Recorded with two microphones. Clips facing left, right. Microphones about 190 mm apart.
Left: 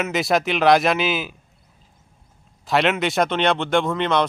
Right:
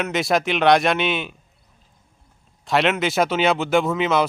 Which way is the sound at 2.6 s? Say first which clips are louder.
Even; centre (ahead or behind).